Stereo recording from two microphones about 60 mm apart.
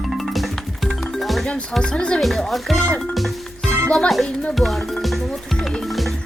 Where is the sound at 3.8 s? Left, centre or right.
Centre.